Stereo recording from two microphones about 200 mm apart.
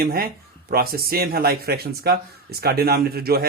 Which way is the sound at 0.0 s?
50° right (ahead or behind).